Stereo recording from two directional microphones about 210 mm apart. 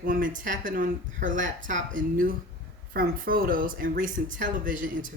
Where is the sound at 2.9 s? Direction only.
45° right (ahead or behind).